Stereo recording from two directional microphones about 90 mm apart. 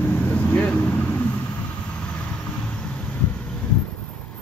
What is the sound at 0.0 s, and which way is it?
Vehicle, 15° left (ahead or behind).